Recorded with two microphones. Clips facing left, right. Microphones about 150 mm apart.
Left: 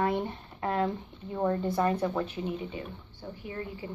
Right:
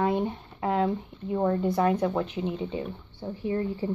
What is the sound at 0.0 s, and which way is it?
A woman's voice, 20° right (ahead or behind).